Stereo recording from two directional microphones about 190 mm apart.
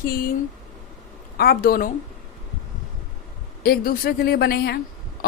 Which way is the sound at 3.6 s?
50° left (ahead or behind).